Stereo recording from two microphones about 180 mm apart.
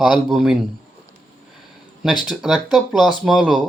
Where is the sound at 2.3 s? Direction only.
5° right (ahead or behind).